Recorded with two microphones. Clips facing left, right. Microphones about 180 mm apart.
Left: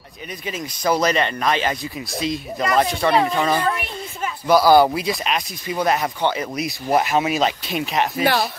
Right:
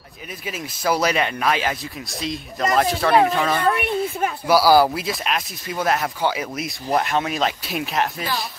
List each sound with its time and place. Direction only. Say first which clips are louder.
0.5 s speech: left 1 dB; 5° right (ahead or behind)
8.2 s speech: left 8 dB; 70° left (ahead or behind)